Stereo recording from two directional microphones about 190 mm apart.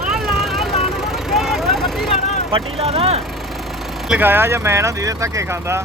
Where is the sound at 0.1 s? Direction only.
Centre (ahead or behind).